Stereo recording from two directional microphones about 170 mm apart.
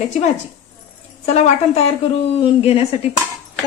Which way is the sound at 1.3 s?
40° left (ahead or behind).